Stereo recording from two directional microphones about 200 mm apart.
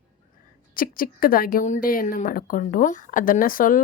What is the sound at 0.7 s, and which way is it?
A woman's voice, 45° left (ahead or behind).